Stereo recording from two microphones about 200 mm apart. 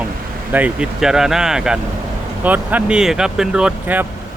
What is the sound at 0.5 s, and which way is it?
Speech, 5° right (ahead or behind).